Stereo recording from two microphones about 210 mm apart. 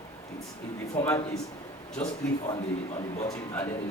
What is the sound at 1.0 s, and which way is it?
Speech, 10° left (ahead or behind).